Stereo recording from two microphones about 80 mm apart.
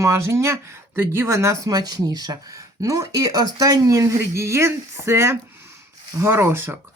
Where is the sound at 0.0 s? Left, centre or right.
Right.